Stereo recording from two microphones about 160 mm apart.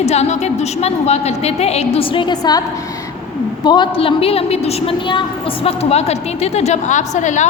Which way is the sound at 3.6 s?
30° left (ahead or behind).